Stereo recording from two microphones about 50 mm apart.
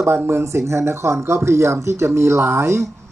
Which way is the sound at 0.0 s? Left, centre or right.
Right.